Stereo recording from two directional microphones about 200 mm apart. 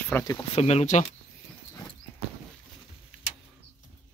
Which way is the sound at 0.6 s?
30° left (ahead or behind).